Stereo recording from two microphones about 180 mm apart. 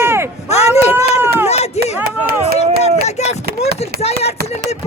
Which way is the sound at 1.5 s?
35° left (ahead or behind).